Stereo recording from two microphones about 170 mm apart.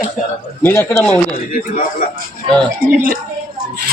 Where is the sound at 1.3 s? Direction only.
55° left (ahead or behind).